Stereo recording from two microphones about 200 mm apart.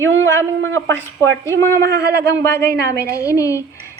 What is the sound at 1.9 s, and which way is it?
Speech, 55° right (ahead or behind).